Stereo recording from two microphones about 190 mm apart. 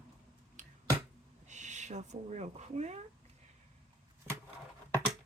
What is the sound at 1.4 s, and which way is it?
Speech, 40° right (ahead or behind).